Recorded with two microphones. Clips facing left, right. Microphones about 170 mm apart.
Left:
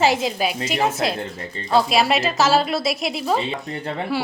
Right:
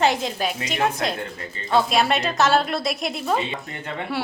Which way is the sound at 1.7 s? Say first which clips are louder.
Left 2 dB; 5° left (ahead or behind).